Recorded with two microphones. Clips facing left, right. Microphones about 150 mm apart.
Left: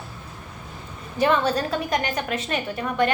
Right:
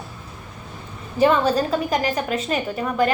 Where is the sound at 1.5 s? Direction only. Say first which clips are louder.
Right 3 dB; 30° right (ahead or behind).